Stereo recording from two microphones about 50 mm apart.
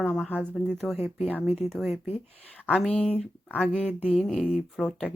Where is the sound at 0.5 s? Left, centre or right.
Centre.